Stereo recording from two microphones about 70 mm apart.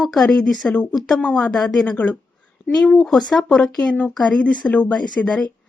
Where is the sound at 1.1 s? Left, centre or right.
Centre.